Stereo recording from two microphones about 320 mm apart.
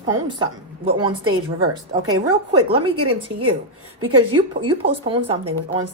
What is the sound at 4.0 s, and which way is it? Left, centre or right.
Speech, right.